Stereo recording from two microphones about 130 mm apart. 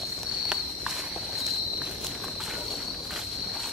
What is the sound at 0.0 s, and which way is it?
Walk, centre (ahead or behind).